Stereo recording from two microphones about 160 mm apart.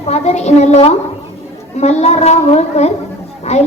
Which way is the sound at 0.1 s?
40° left (ahead or behind).